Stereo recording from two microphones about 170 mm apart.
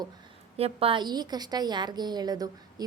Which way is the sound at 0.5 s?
35° right (ahead or behind).